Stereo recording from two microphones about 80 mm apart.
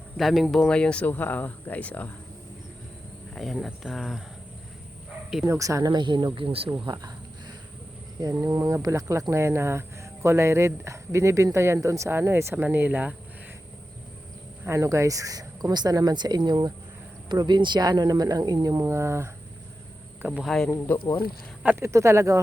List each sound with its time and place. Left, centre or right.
0.2 s speech: centre
0.7 s speech: centre
3.3 s speech: centre
5.5 s speech: right
5.9 s speech: right
6.8 s cricket: right
8.2 s speech: right; by 13.1 s centre
14.6 s speech: right
18.8 s speech: right
20.4 s speech: centre
20.7 s speech: left
21.8 s speech: right